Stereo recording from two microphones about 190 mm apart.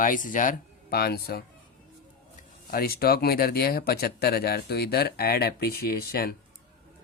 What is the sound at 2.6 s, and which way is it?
Speech, 50° left (ahead or behind).